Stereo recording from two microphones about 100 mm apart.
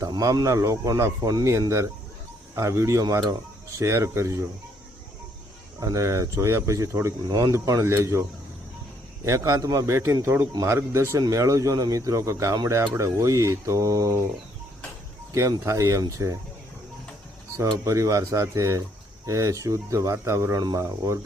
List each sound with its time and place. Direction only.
0.0 s speech: 35° right (ahead or behind)
5.8 s speech: 30° right (ahead or behind)
7.3 s speech: 45° right (ahead or behind)
7.5 s speech: 35° right (ahead or behind)
9.2 s speech: 30° right (ahead or behind)
15.4 s speech: 30° right (ahead or behind)
17.8 s speech: 30° right (ahead or behind)